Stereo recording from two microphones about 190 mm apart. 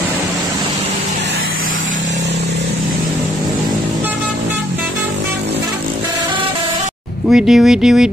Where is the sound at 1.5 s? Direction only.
90° right.